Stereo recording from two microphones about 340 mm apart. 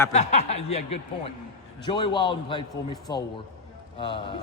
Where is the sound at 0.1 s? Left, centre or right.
Centre.